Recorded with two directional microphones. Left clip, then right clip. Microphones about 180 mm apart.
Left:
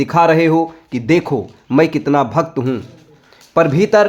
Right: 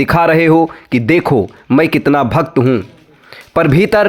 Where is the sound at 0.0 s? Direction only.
40° right (ahead or behind).